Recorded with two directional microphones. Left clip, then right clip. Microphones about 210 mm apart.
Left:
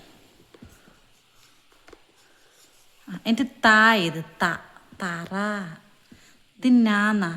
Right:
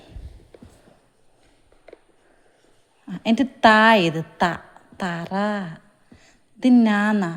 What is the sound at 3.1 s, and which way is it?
A woman's voice, 15° right (ahead or behind).